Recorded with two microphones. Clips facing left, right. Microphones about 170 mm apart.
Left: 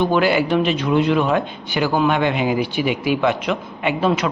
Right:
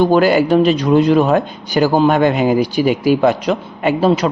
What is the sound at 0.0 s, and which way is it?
Speech, 40° right (ahead or behind).